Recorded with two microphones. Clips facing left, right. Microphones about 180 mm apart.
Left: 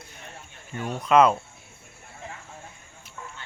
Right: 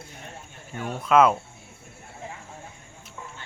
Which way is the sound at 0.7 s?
Centre (ahead or behind).